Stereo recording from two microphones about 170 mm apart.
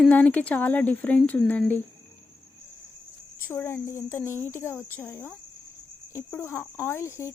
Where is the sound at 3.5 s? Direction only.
15° left (ahead or behind).